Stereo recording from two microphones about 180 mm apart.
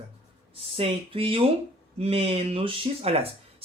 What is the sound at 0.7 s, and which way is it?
Speech, 30° right (ahead or behind).